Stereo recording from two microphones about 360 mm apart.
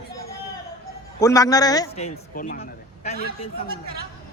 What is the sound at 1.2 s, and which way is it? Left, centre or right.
Speech, centre.